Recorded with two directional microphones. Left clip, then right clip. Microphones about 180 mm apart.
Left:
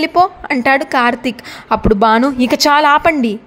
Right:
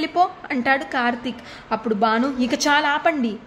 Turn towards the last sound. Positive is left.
turn(degrees=45)  # may be behind; listen again after turning